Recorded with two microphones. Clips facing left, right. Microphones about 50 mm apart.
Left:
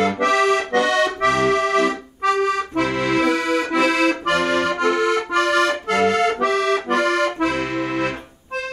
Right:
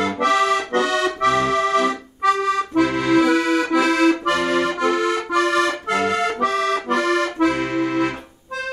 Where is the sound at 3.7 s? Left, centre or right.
Left.